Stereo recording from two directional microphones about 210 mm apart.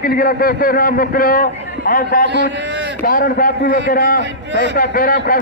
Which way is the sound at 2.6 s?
55° right (ahead or behind).